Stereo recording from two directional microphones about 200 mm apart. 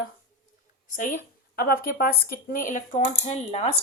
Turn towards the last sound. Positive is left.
turn(degrees=30)  # may be behind; listen again after turning